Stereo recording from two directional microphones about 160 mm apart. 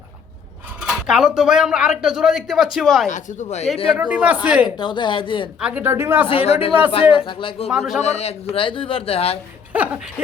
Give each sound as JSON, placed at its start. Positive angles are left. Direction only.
{"t": 0.8, "sound": "speech", "side_deg": -5}
{"t": 3.1, "sound": "speech", "side_deg": 50}
{"t": 3.9, "sound": "speech", "side_deg": -10}
{"t": 4.8, "sound": "a woman's voice", "side_deg": 30}
{"t": 5.5, "sound": "speech", "side_deg": -10}
{"t": 6.2, "sound": "speech", "side_deg": 40}
{"t": 7.7, "sound": "speech", "side_deg": -5}
{"t": 8.0, "sound": "speech", "side_deg": 40}
{"t": 9.7, "sound": "speech", "side_deg": -10}